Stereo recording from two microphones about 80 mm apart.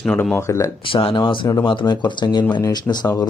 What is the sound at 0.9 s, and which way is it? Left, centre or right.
Speech, left.